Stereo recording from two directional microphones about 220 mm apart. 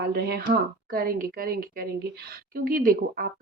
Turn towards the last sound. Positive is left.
turn(degrees=-40)  # may be behind; listen again after turning